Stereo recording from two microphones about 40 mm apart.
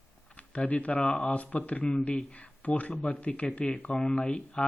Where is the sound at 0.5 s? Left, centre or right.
Left.